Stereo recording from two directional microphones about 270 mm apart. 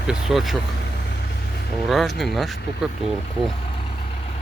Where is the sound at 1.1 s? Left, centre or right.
Left.